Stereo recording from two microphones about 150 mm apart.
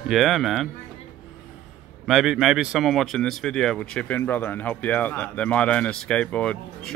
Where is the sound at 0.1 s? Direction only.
Centre (ahead or behind).